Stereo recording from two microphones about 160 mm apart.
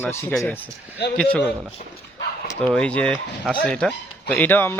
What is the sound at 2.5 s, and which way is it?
Speech, 5° left (ahead or behind).